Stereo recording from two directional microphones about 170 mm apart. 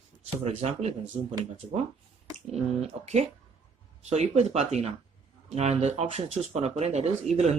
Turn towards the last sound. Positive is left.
turn(degrees=-40)  # may be behind; listen again after turning